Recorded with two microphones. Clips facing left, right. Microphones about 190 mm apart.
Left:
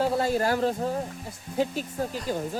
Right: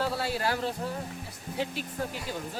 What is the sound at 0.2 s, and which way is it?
Speech, 45° left (ahead or behind).